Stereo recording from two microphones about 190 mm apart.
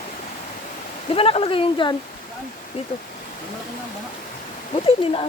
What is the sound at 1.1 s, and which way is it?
Speech, 30° left (ahead or behind).